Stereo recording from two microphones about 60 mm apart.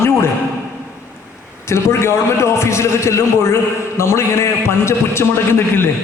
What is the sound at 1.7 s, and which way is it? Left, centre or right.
A man's voice, left.